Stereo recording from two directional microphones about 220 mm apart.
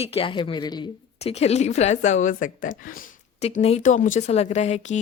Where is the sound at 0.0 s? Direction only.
25° left (ahead or behind).